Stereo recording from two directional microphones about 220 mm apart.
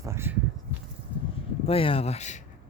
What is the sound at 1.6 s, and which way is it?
Speech, 25° left (ahead or behind).